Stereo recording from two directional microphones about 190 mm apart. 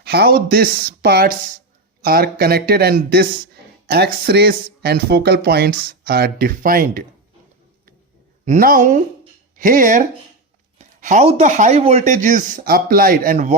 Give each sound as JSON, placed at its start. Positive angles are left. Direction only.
{"t": 0.0, "sound": "speech", "side_deg": -55}
{"t": 8.4, "sound": "speech", "side_deg": -45}